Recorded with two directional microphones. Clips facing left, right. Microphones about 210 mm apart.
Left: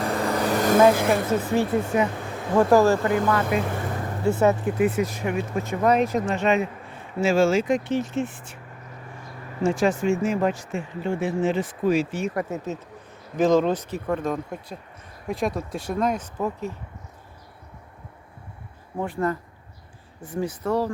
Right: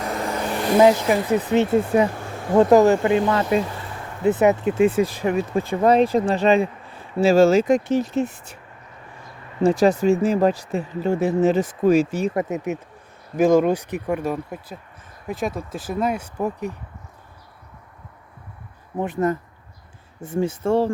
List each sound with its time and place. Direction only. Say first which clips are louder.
0.0 s vehicle: left 2 dB; 35° left (ahead or behind)
1.1 s speech: right 3 dB; 20° right (ahead or behind)
3.7 s vehicle: left 5 dB; 50° left (ahead or behind)
4.2 s speech: right 3 dB; 20° right (ahead or behind); by 8.5 s 40° right (ahead or behind)
9.6 s speech: right 5 dB; 35° right (ahead or behind)
12.3 s speech: right 4 dB; 20° right (ahead or behind)
18.9 s speech: right 4 dB; 20° right (ahead or behind)